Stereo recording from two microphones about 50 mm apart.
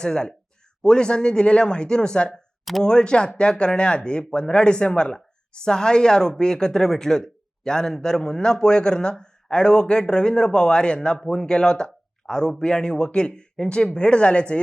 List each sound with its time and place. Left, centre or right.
0.0 s speech: centre